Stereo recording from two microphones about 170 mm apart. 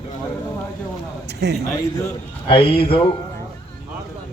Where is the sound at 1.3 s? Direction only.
80° right.